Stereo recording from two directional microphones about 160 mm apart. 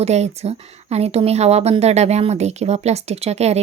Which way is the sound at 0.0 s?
45° right (ahead or behind).